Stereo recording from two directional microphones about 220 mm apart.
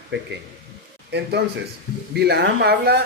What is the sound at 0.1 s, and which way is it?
A man's voice, 50° right (ahead or behind).